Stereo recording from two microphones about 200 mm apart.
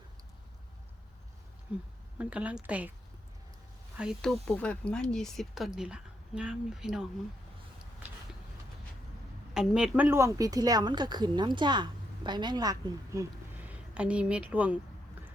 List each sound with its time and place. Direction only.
1.7 s a woman's voice: 5° right (ahead or behind)
3.9 s speech: centre (ahead or behind)
9.6 s speech: 5° right (ahead or behind)
13.6 s speech: 5° right (ahead or behind)